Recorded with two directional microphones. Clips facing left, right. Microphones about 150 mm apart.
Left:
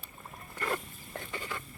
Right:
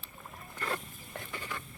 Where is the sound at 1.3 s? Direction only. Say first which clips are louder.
Left 2 dB; 15° left (ahead or behind).